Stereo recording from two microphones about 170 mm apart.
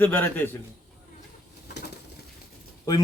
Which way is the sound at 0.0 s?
10° left (ahead or behind).